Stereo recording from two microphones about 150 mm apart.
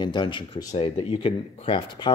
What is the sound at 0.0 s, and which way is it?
Speech, 30° left (ahead or behind).